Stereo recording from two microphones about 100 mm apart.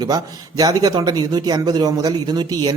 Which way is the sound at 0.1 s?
40° right (ahead or behind).